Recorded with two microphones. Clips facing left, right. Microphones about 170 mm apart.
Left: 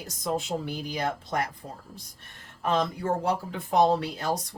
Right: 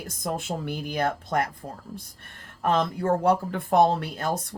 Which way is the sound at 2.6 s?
50° right (ahead or behind).